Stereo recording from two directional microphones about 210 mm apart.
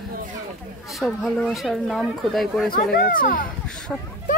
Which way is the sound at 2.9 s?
40° left (ahead or behind).